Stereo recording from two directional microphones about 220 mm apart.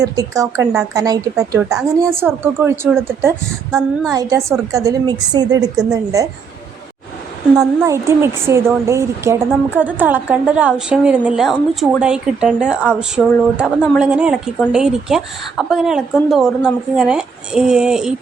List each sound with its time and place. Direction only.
0.0 s speech: 15° right (ahead or behind)
7.5 s a woman's voice: 5° right (ahead or behind)